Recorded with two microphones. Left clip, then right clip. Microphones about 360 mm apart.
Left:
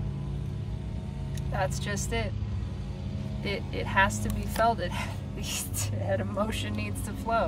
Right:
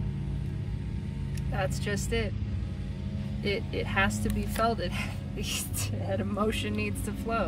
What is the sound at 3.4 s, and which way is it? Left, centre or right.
Speech, centre.